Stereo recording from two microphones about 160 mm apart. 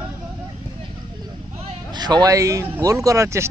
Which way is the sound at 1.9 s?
25° right (ahead or behind).